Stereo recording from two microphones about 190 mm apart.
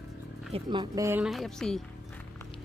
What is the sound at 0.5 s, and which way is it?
Speech, 25° right (ahead or behind).